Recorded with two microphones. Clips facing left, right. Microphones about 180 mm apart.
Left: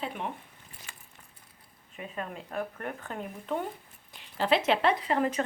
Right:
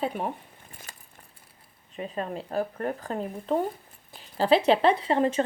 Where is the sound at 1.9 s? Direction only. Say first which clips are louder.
Right 6 dB; 35° right (ahead or behind).